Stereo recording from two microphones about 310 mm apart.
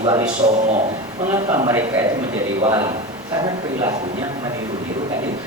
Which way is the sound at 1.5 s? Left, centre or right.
Centre.